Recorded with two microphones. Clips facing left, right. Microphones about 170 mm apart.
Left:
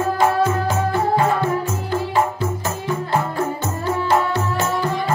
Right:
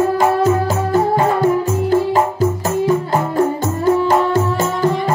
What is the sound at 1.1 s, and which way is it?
Music, 40° right (ahead or behind).